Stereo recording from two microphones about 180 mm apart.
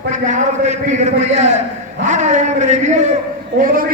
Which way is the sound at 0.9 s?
40° right (ahead or behind).